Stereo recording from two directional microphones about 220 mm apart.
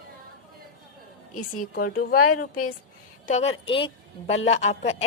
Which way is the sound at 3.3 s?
30° left (ahead or behind).